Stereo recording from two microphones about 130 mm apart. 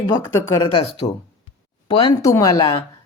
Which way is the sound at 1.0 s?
65° left (ahead or behind).